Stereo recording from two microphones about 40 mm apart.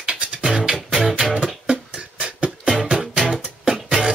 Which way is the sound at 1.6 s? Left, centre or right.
Right.